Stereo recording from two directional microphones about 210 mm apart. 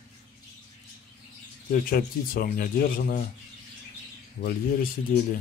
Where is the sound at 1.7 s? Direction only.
45° left (ahead or behind).